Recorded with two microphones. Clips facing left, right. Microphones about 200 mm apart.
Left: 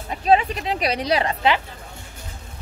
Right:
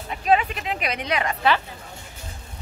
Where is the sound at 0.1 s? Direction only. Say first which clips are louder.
Left 3 dB; 30° left (ahead or behind).